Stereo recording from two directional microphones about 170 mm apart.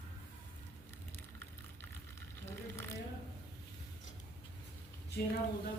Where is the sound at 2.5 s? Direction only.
15° left (ahead or behind).